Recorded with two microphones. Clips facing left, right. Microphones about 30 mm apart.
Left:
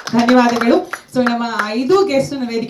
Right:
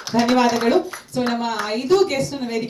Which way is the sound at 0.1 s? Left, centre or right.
Left.